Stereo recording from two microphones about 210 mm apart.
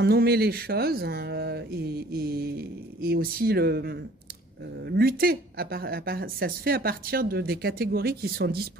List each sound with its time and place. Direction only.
0.0 s speech: 50° right (ahead or behind)